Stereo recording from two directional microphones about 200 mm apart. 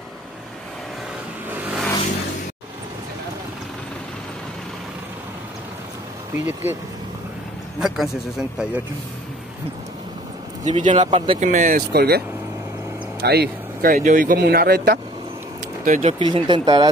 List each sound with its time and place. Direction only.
1.5 s vehicle: 5° right (ahead or behind)
6.3 s speech: 10° right (ahead or behind)
7.8 s speech: centre (ahead or behind)
10.6 s speech: 40° right (ahead or behind)
13.2 s speech: 55° right (ahead or behind)
15.8 s speech: 40° right (ahead or behind); by 16.9 s 20° right (ahead or behind)